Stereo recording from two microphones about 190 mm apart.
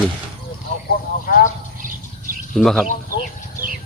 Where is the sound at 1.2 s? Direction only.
50° left (ahead or behind).